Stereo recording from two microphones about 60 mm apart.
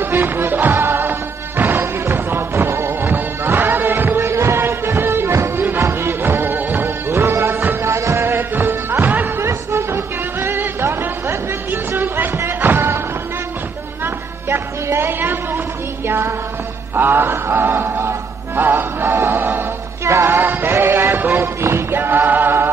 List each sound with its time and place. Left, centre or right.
0.0 s music: right
9.4 s music: right
14.0 s music: right
16.9 s mantra: right
18.6 s music: right
20.1 s music: right
20.3 s music: right
21.5 s a sound: right